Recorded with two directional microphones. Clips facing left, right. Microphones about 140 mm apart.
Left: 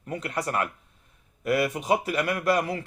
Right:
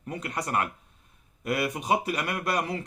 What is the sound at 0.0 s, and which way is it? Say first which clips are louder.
Speech: left 3 dB; 20° right (ahead or behind).